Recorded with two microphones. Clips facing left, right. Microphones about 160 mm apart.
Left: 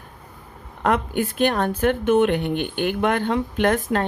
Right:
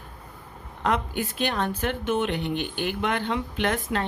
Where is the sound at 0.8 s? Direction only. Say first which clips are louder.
Left 5 dB; 55° left (ahead or behind).